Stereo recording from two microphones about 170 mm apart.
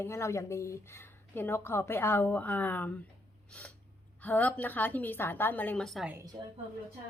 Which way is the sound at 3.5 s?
5° left (ahead or behind).